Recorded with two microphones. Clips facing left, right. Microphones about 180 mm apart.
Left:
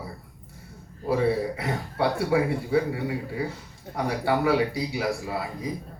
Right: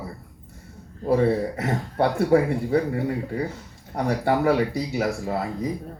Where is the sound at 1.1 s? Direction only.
45° right (ahead or behind).